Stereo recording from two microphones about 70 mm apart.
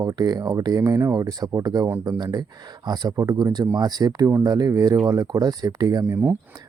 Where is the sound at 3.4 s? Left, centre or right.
Right.